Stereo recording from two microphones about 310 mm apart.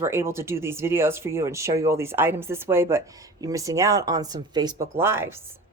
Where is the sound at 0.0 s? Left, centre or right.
Centre.